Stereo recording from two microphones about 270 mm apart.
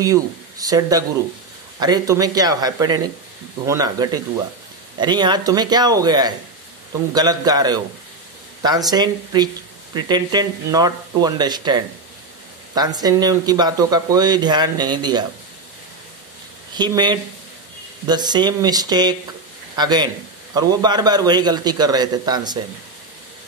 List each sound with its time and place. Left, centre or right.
0.0 s speech: centre
16.7 s a man's voice: centre